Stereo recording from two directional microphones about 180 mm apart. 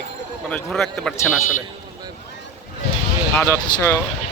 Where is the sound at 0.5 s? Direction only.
5° left (ahead or behind).